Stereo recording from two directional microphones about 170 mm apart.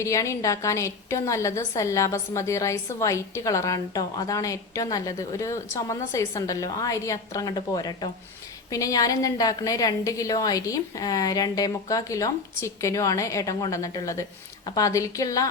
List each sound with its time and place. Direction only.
0.0 s a woman's voice: 20° left (ahead or behind)